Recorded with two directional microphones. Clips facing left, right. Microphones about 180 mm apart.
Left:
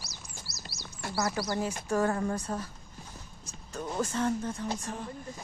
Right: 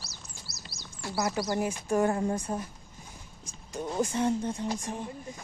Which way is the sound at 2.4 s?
15° right (ahead or behind).